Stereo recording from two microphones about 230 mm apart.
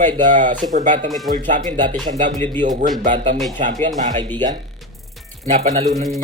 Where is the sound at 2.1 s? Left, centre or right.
Right.